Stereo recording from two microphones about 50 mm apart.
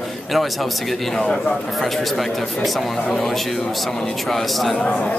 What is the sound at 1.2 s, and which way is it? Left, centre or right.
Speech, centre.